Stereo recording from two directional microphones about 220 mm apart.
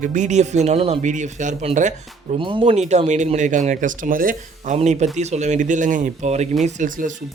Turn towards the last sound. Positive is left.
turn(degrees=-35)  # may be behind; listen again after turning